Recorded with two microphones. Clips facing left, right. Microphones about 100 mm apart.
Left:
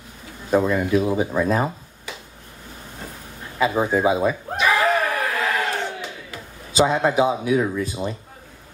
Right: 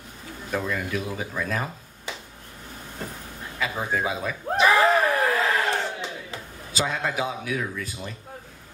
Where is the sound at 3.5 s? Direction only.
30° left (ahead or behind).